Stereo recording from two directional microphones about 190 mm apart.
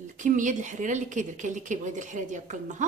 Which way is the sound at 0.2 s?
40° right (ahead or behind).